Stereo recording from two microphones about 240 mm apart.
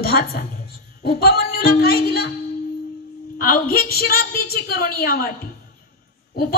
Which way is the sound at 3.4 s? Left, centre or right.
Left.